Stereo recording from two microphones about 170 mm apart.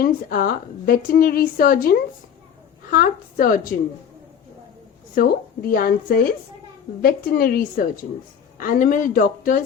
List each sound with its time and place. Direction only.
0.0 s a woman's voice: 60° left (ahead or behind)
5.1 s a woman's voice: 60° left (ahead or behind)